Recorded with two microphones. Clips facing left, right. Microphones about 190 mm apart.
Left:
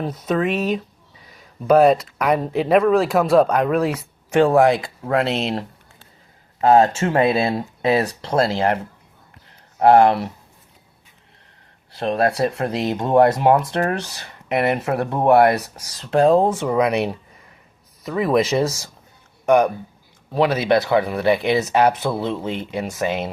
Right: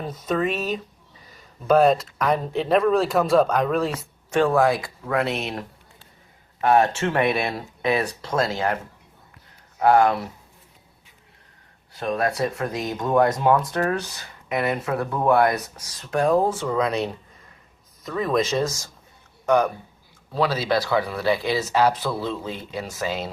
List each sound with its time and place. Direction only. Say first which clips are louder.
0.0 s speech: left 3 dB; centre (ahead or behind)
4.4 s speech: left 4 dB; 20° left (ahead or behind)
11.9 s speech: left 4 dB; 30° left (ahead or behind)
12.6 s speech: left 5 dB; 70° left (ahead or behind)
13.0 s speech: left 4 dB; 30° left (ahead or behind)
13.9 s speech: left 1 dB; 70° left (ahead or behind)
16.0 s speech: left 5 dB; 30° left (ahead or behind)
18.0 s speech: left 4 dB; 10° left (ahead or behind)